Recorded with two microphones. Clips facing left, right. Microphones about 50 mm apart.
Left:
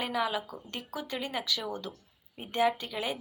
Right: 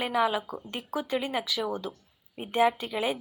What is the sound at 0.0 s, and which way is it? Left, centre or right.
Speech, centre.